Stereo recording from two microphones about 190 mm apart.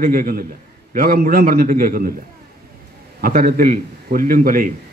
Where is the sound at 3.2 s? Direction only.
50° right (ahead or behind).